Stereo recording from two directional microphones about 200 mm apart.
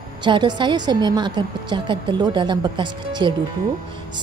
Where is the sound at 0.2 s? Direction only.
20° right (ahead or behind).